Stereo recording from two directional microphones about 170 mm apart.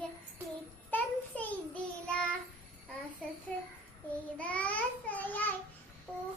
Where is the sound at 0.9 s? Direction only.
10° left (ahead or behind).